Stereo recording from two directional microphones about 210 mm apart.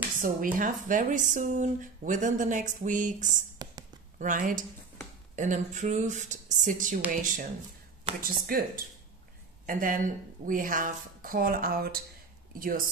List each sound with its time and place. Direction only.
0.2 s speech: 40° right (ahead or behind)
3.6 s a sound: 20° right (ahead or behind)
4.2 s speech: 40° right (ahead or behind)